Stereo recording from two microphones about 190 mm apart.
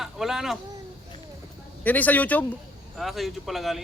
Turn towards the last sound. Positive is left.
turn(degrees=0)  # may be behind; listen again after turning